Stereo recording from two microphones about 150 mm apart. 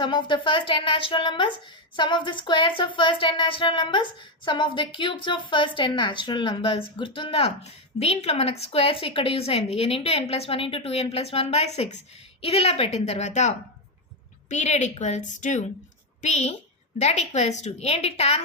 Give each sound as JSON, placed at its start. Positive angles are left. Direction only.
{"t": 0.0, "sound": "a woman's voice", "side_deg": 30}
{"t": 14.5, "sound": "a woman's voice", "side_deg": 50}